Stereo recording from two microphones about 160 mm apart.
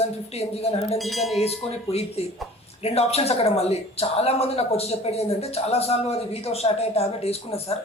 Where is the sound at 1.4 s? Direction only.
40° left (ahead or behind).